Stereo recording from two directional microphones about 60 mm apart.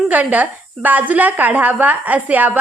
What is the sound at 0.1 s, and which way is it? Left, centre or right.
Speech, right.